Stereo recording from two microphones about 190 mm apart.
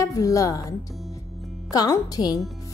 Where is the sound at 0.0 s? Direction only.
15° left (ahead or behind).